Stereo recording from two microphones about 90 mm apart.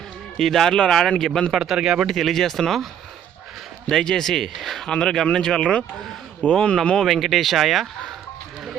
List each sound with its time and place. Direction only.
0.3 s a man's voice: 5° left (ahead or behind)
3.8 s a man's voice: 5° left (ahead or behind)